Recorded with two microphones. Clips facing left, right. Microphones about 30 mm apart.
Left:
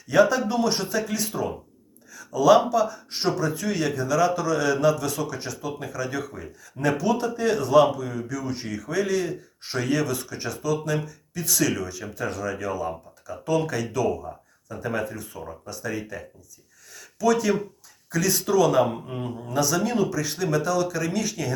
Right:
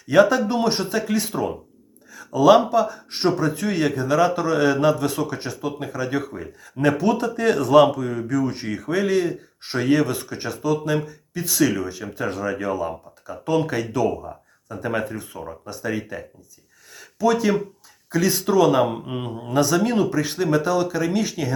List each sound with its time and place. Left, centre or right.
0.1 s speech: right
15.4 s speech: right